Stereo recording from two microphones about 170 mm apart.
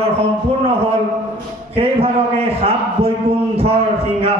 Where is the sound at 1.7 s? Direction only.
35° right (ahead or behind).